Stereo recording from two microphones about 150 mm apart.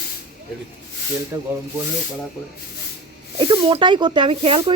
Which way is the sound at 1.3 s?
15° right (ahead or behind).